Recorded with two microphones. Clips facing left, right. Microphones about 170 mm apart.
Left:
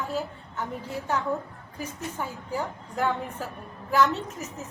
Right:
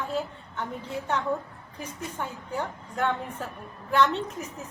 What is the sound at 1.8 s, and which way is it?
A woman's voice, 5° left (ahead or behind).